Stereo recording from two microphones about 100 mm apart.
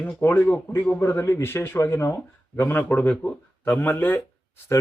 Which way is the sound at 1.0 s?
30° left (ahead or behind).